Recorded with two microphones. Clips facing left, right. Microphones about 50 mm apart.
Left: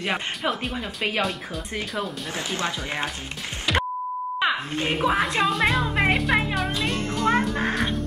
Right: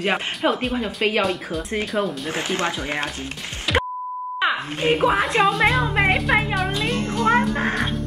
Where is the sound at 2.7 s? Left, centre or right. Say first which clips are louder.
Right 3 dB; centre.